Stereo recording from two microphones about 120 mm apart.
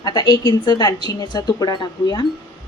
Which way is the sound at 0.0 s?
35° left (ahead or behind).